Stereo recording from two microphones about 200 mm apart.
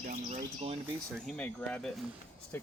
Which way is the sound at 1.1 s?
5° left (ahead or behind).